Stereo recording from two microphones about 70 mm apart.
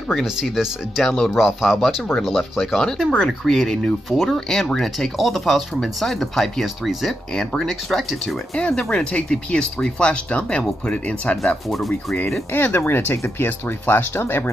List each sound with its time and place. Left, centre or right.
0.1 s speech: centre
8.5 s speech: centre
11.4 s speech: centre
12.5 s speech: left